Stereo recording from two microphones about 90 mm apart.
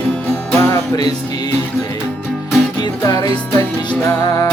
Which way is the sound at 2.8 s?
50° left (ahead or behind).